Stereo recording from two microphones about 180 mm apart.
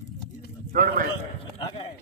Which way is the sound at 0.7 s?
50° right (ahead or behind).